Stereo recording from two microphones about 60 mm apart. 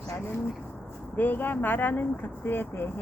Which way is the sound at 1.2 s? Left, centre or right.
Left.